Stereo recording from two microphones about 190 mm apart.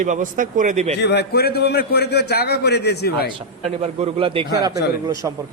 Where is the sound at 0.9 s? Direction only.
60° left (ahead or behind).